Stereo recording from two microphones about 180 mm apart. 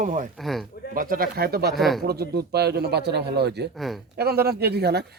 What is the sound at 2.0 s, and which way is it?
Speech, 60° right (ahead or behind).